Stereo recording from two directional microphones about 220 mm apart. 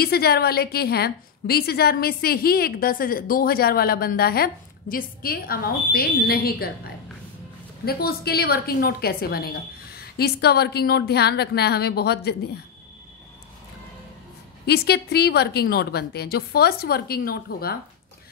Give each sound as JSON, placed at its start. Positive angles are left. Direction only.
{"t": 0.0, "sound": "a woman's voice", "side_deg": 45}
{"t": 7.8, "sound": "a woman's voice", "side_deg": 45}
{"t": 14.7, "sound": "a woman's voice", "side_deg": 45}